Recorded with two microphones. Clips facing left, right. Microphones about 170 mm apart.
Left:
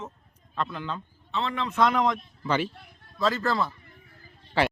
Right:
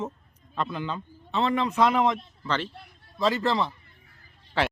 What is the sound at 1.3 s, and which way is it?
Speech, 15° right (ahead or behind).